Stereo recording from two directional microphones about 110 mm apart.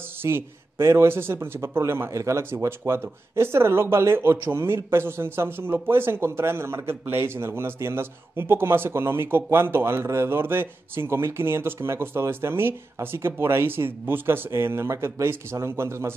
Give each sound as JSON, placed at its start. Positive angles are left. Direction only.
{"t": 0.2, "sound": "a man's voice", "side_deg": -20}